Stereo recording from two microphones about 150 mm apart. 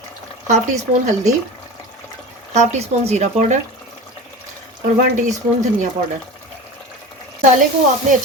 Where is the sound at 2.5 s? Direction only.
50° right (ahead or behind).